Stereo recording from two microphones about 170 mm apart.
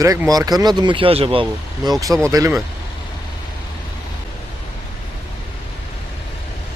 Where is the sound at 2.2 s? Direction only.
15° right (ahead or behind).